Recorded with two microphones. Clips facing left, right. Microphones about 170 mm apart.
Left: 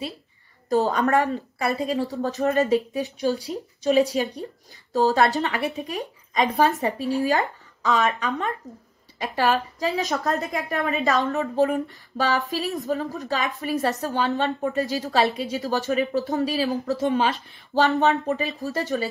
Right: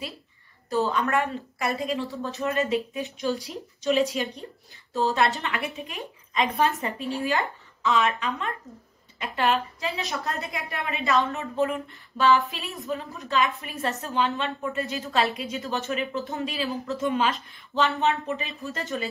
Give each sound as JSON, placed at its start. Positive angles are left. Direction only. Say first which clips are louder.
{"t": 0.9, "sound": "speech", "louder": "left 4 dB", "side_deg": 40}